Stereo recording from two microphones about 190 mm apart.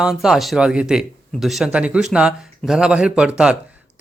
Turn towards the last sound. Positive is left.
turn(degrees=-5)  # may be behind; listen again after turning